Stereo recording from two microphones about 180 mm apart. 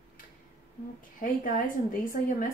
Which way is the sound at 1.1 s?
50° left (ahead or behind).